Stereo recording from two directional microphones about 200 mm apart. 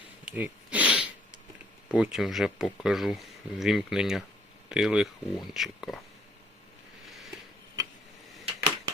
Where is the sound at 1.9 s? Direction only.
5° right (ahead or behind).